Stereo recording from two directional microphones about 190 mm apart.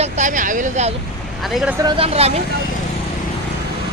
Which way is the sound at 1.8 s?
30° right (ahead or behind).